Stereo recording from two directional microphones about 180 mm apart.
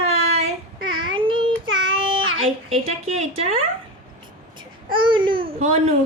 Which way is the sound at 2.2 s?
90° right.